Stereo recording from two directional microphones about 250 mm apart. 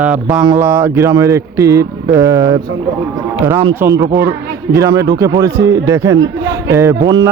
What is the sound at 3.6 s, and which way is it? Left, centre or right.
A man's voice, centre.